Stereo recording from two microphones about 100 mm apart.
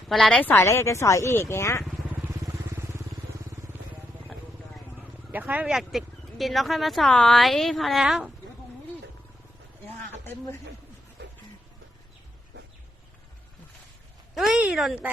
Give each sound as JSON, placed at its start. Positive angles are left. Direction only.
{"t": 0.1, "sound": "speech", "side_deg": 5}
{"t": 0.4, "sound": "speech", "side_deg": 25}
{"t": 2.4, "sound": "vehicle", "side_deg": -30}
{"t": 5.3, "sound": "a sound", "side_deg": -15}
{"t": 5.6, "sound": "speech", "side_deg": -5}
{"t": 14.3, "sound": "speech", "side_deg": 0}